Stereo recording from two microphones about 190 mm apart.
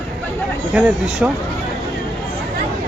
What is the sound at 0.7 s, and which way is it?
Speech, 5° right (ahead or behind).